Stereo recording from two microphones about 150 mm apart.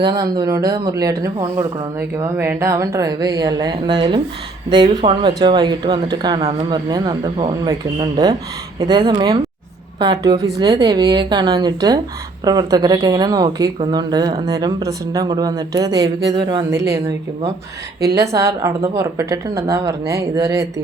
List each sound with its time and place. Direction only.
0.0 s a woman's voice: 30° right (ahead or behind)
18.1 s a woman's voice: 20° right (ahead or behind)